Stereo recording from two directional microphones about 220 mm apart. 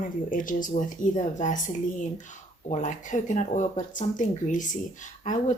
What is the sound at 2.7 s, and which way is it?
Speech, 35° left (ahead or behind).